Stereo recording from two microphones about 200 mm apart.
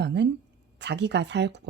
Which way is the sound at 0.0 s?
60° right (ahead or behind).